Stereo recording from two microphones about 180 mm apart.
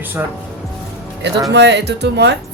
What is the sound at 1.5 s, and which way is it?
Speech, 70° right (ahead or behind).